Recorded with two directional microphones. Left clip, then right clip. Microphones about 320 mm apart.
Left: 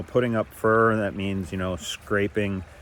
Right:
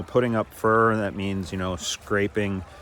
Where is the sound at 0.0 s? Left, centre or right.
Centre.